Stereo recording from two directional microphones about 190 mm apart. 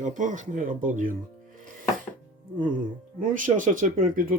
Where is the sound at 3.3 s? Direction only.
45° right (ahead or behind).